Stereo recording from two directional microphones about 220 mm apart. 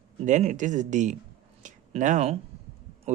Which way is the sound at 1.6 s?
35° right (ahead or behind).